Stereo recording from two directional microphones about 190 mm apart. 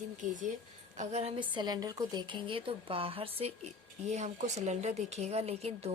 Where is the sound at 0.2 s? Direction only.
40° right (ahead or behind).